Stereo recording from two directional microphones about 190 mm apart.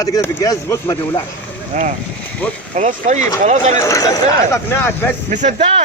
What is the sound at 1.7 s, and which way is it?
Speech, 40° right (ahead or behind).